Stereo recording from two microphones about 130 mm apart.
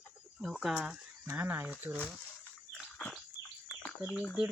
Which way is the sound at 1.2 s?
15° right (ahead or behind).